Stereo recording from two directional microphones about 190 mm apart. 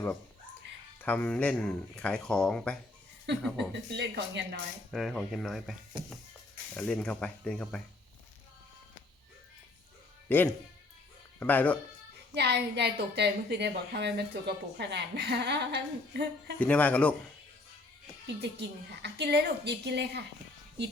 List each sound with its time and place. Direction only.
1.0 s speech: 5° left (ahead or behind)
3.3 s a woman's voice: 65° right (ahead or behind)
4.9 s speech: centre (ahead or behind)
6.7 s speech: 5° left (ahead or behind)
10.2 s speech: 10° left (ahead or behind)
12.3 s a woman's voice: 60° right (ahead or behind)
16.6 s a man's voice: 5° left (ahead or behind)
18.3 s a woman's voice: 60° right (ahead or behind)